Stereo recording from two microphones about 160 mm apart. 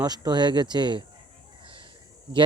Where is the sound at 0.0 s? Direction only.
25° right (ahead or behind).